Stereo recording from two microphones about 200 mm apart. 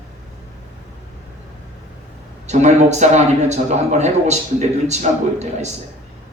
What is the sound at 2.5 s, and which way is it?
Speech, 35° right (ahead or behind).